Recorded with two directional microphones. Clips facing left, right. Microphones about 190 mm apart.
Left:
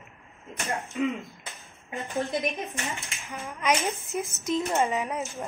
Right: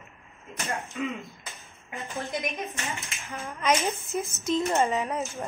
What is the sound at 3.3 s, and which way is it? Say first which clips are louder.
Speech: right 1 dB; 15° left (ahead or behind).